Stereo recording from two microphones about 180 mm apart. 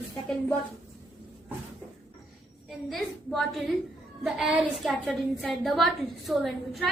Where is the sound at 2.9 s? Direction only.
Centre (ahead or behind).